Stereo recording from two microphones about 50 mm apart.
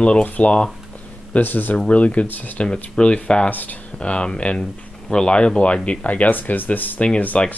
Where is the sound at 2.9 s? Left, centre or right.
Left.